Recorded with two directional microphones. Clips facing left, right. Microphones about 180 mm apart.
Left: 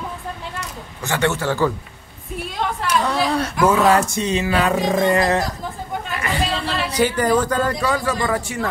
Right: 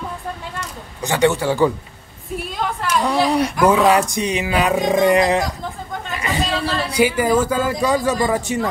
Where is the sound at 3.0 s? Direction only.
10° right (ahead or behind).